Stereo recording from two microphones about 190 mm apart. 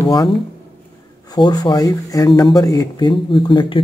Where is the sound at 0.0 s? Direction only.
20° left (ahead or behind).